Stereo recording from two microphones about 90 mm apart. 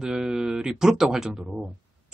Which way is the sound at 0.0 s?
5° right (ahead or behind).